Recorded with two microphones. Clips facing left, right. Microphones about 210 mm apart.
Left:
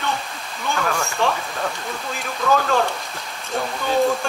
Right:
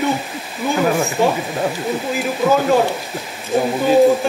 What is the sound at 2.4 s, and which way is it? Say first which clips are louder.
Speech: right 4 dB; 20° right (ahead or behind).